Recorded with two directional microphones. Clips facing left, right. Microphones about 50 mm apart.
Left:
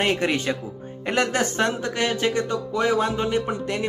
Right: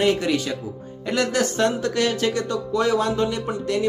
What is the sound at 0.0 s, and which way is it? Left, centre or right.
Speech, left.